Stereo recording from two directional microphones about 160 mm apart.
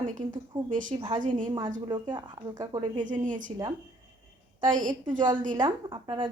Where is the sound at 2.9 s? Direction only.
55° right (ahead or behind).